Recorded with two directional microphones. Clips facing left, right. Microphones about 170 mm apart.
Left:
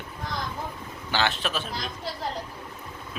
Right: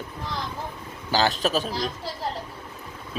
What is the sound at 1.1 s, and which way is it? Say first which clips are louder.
Speech: right 5 dB; 40° right (ahead or behind).